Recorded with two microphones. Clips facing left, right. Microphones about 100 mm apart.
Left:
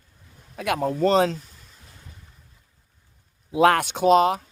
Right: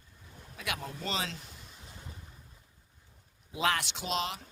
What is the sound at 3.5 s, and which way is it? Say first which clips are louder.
Speech: left 13 dB; 55° left (ahead or behind).